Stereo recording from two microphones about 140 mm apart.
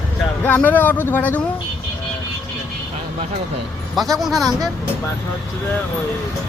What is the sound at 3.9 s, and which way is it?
Speech, centre (ahead or behind).